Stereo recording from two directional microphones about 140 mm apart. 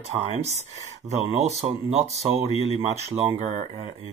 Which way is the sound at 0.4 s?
50° right (ahead or behind).